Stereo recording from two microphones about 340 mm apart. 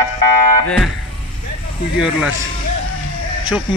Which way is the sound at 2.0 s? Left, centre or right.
Centre.